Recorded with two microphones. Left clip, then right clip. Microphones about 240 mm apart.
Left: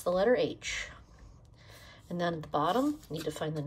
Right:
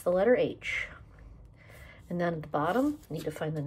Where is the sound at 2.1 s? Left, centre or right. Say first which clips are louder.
Right 1 dB; left.